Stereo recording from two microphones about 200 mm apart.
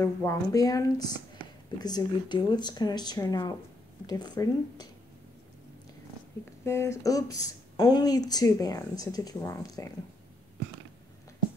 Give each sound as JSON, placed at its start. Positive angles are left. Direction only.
{"t": 0.0, "sound": "speech", "side_deg": 15}
{"t": 6.6, "sound": "speech", "side_deg": 15}